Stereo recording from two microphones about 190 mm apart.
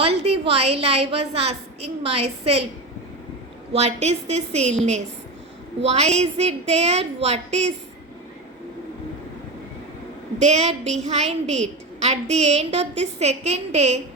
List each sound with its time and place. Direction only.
0.0 s a woman's voice: 30° right (ahead or behind)
3.7 s a woman's voice: 35° right (ahead or behind)
5.8 s a woman's voice: 35° right (ahead or behind)
10.4 s a woman's voice: 35° right (ahead or behind)